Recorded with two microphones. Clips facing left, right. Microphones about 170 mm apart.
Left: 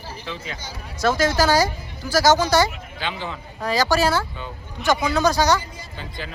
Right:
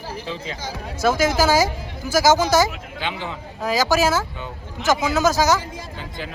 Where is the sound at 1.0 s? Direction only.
10° right (ahead or behind).